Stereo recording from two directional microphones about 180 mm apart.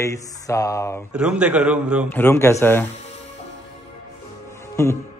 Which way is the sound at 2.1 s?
15° left (ahead or behind).